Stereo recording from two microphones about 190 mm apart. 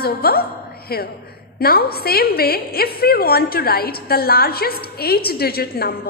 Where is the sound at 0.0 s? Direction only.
50° left (ahead or behind).